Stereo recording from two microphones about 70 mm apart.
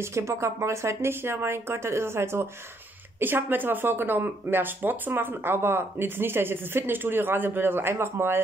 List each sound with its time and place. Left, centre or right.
0.0 s speech: right